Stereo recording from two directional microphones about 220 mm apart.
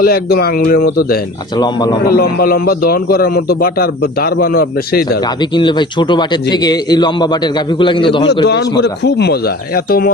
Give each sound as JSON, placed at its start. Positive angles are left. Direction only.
{"t": 0.0, "sound": "a man's voice", "side_deg": 45}
{"t": 1.5, "sound": "a man's voice", "side_deg": 20}
{"t": 2.0, "sound": "a man's voice", "side_deg": 45}
{"t": 5.4, "sound": "a man's voice", "side_deg": 20}
{"t": 8.4, "sound": "a man's voice", "side_deg": 50}